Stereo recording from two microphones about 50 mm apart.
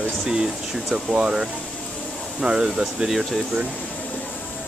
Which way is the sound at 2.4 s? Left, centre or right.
Centre.